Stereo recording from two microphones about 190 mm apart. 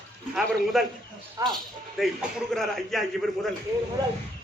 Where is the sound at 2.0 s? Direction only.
Centre (ahead or behind).